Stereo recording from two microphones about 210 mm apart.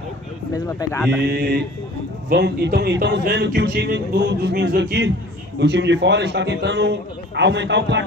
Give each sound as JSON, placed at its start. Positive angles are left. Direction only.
{"t": 0.5, "sound": "speech", "side_deg": 15}
{"t": 1.2, "sound": "a man's voice", "side_deg": -50}